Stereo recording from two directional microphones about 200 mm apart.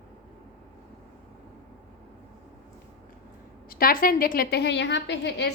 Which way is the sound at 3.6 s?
45° left (ahead or behind).